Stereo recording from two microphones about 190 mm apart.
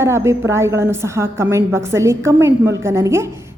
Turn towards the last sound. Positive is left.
turn(degrees=-15)  # may be behind; listen again after turning